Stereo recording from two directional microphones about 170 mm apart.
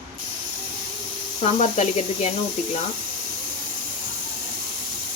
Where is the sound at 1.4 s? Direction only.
40° left (ahead or behind).